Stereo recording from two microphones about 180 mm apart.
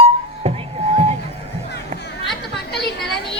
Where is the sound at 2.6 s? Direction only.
65° left (ahead or behind).